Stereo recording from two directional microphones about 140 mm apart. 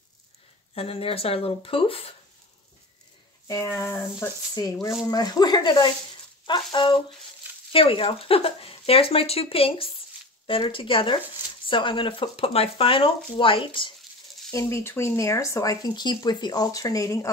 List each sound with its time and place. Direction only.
0.7 s speech: 45° left (ahead or behind)
3.4 s speech: 20° left (ahead or behind); by 13.7 s 40° left (ahead or behind)
14.5 s speech: 20° left (ahead or behind)